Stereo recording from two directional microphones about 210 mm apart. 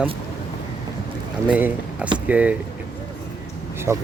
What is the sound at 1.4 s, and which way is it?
Speech, 5° right (ahead or behind).